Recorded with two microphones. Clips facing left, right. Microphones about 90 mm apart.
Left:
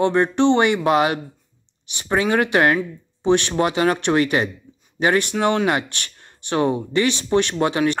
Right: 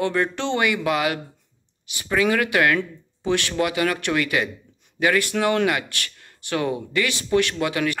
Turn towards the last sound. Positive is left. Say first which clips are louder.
# left 4 dB
turn(degrees=30)  # may be behind; listen again after turning